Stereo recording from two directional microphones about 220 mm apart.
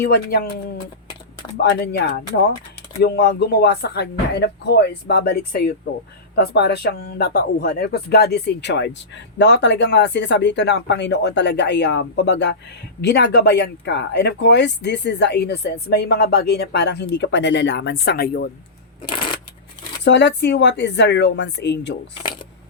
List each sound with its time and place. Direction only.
0.0 s speech: 45° left (ahead or behind)
1.7 s speech: 45° left (ahead or behind)
20.1 s speech: 50° left (ahead or behind)